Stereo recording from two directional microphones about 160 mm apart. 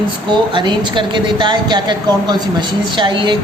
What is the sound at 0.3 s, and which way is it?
A woman's voice, 30° right (ahead or behind).